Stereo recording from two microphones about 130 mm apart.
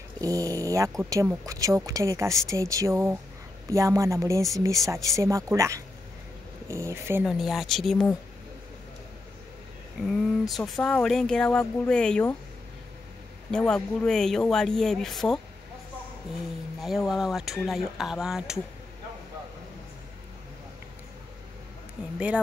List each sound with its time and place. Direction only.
0.2 s speech: 25° right (ahead or behind)
7.2 s speech: centre (ahead or behind)
10.0 s speech: centre (ahead or behind)
13.5 s speech: 5° left (ahead or behind)
16.8 s speech: centre (ahead or behind)